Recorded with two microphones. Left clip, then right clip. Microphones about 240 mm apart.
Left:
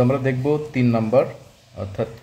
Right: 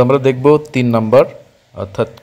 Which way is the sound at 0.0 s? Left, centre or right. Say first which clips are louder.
Right 10 dB; right.